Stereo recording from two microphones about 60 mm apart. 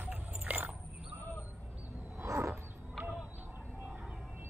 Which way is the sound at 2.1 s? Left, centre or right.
Right.